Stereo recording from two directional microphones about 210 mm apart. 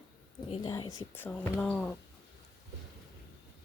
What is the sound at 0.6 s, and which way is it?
Speech, 15° left (ahead or behind).